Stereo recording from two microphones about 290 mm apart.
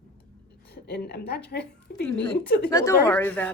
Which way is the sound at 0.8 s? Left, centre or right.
Left.